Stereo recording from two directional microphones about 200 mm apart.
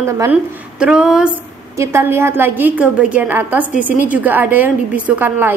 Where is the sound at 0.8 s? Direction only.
5° right (ahead or behind).